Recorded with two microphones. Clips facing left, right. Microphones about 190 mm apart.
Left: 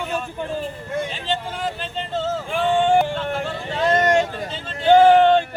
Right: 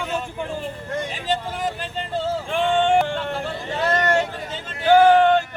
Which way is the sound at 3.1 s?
15° left (ahead or behind).